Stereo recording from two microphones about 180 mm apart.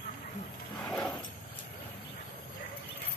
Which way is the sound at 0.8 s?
5° left (ahead or behind).